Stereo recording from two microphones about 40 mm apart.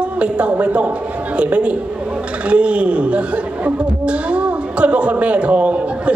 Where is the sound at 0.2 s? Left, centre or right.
Right.